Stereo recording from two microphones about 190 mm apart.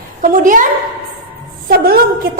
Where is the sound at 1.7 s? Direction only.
50° right (ahead or behind).